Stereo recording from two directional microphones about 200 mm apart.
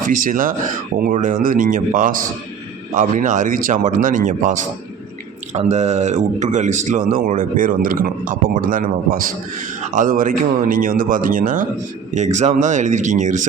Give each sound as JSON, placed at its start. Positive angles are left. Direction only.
{"t": 0.1, "sound": "speech", "side_deg": -45}